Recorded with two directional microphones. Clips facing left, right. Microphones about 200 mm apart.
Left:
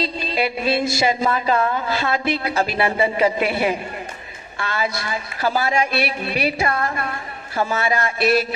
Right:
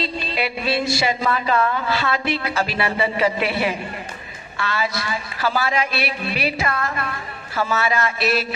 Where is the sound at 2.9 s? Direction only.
20° left (ahead or behind).